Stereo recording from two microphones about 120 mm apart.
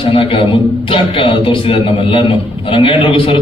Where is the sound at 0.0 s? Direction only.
45° left (ahead or behind).